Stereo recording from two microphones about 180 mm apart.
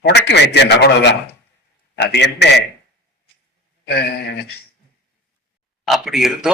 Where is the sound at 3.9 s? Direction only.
65° left (ahead or behind).